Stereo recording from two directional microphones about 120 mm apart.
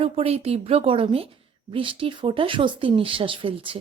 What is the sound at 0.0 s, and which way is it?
Speech, 55° right (ahead or behind).